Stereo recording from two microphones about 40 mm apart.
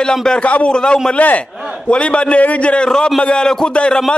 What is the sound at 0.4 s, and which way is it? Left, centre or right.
Speech, left.